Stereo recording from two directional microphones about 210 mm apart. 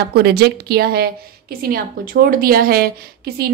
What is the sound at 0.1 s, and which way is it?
A woman's voice, 50° right (ahead or behind).